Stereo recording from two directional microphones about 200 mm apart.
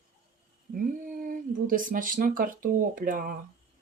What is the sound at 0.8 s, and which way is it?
Speech, 45° right (ahead or behind).